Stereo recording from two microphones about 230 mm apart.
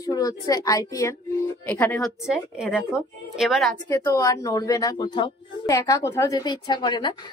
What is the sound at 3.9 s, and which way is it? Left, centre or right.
A woman's voice, centre.